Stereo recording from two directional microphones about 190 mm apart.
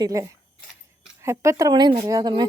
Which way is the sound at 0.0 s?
15° right (ahead or behind).